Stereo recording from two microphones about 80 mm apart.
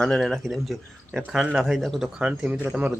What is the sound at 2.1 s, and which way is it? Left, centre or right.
Speech, centre.